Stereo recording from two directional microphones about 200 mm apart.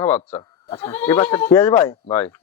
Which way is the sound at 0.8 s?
10° left (ahead or behind).